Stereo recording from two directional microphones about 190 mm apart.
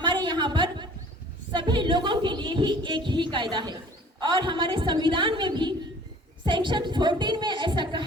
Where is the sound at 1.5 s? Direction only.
25° right (ahead or behind).